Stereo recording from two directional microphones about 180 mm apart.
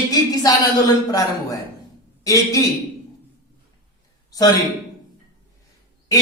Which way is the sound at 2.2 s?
20° left (ahead or behind).